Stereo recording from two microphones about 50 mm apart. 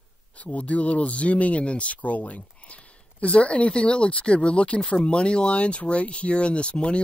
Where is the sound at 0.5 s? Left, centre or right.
Left.